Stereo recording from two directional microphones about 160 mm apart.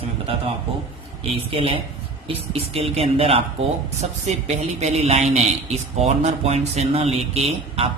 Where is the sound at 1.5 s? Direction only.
35° right (ahead or behind).